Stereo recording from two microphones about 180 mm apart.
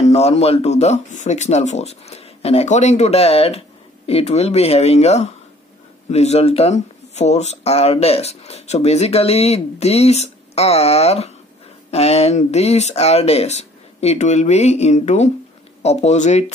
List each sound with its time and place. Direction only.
0.0 s speech: 35° left (ahead or behind)